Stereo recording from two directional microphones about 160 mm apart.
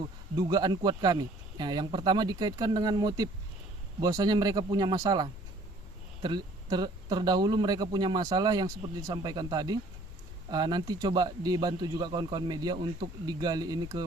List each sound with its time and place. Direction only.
0.3 s speech: 25° right (ahead or behind)